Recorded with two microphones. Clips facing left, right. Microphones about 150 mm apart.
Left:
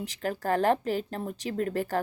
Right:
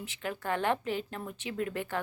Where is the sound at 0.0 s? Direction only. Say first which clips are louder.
Left 5 dB; 40° left (ahead or behind).